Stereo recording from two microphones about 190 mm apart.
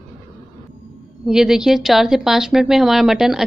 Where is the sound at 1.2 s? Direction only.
5° right (ahead or behind).